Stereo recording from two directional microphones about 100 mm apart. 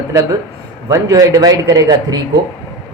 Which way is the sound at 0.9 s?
35° right (ahead or behind).